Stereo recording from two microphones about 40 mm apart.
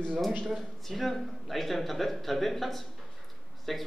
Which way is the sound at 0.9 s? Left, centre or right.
Centre.